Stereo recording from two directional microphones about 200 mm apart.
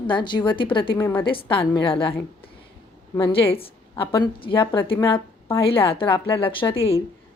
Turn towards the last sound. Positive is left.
turn(degrees=30)  # may be behind; listen again after turning